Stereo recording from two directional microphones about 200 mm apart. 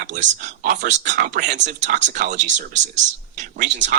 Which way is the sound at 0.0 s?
40° right (ahead or behind).